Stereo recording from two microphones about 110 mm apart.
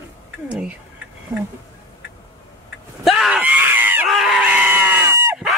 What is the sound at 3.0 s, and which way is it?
Speech, 5° right (ahead or behind).